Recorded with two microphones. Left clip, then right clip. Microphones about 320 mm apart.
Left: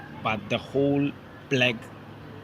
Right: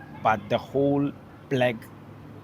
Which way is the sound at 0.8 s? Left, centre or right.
Right.